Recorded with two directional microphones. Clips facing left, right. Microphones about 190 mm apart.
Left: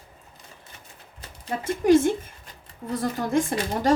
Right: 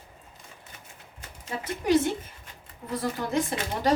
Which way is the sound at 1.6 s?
45° left (ahead or behind).